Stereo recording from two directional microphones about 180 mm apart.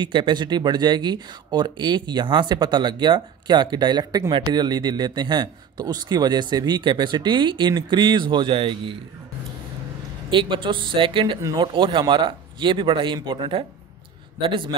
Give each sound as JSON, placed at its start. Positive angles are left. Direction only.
{"t": 0.0, "sound": "speech", "side_deg": -25}
{"t": 10.3, "sound": "speech", "side_deg": -25}